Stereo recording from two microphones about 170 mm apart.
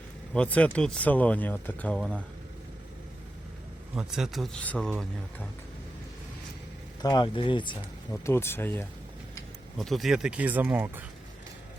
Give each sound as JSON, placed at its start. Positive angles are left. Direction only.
{"t": 0.3, "sound": "speech", "side_deg": 10}
{"t": 3.9, "sound": "speech", "side_deg": 0}
{"t": 7.0, "sound": "speech", "side_deg": 25}
{"t": 8.1, "sound": "speech", "side_deg": 15}
{"t": 9.7, "sound": "speech", "side_deg": 0}